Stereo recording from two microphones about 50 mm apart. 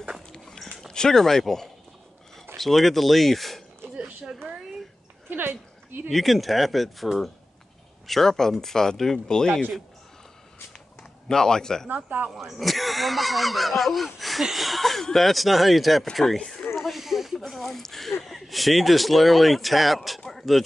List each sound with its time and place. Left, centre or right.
0.3 s dog: centre
0.9 s speech: centre
3.9 s a sound: centre
5.3 s speech: right
6.0 s speech: centre
11.0 s speech: centre
11.9 s speech: right
12.3 s speech: centre
16.3 s speech: centre
16.7 s speech: centre